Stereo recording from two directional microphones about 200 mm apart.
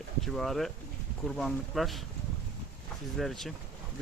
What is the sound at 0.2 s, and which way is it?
Speech, centre (ahead or behind).